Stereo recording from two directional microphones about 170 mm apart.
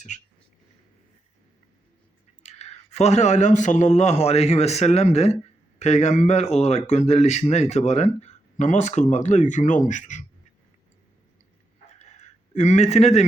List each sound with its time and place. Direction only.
0.1 s speech: 45° left (ahead or behind)
2.4 s speech: 40° left (ahead or behind)
11.9 s chicken: 40° left (ahead or behind)